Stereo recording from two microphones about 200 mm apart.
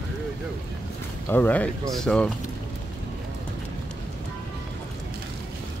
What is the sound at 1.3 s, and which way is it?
Speech, 10° left (ahead or behind).